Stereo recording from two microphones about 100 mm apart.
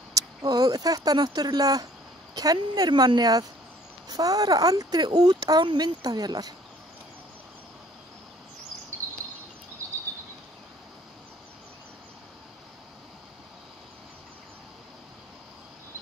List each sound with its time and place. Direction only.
0.1 s speech: 40° right (ahead or behind)